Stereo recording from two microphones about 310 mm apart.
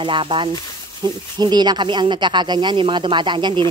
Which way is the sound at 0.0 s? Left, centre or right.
Centre.